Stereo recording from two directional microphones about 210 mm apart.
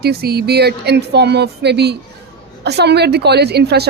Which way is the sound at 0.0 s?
50° right (ahead or behind).